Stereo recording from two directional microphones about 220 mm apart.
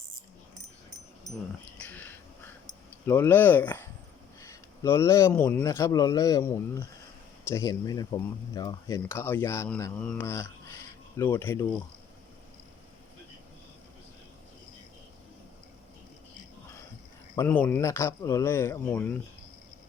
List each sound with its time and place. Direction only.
1.8 s cat: 10° left (ahead or behind)
3.1 s speech: 10° left (ahead or behind)
17.3 s speech: 10° left (ahead or behind)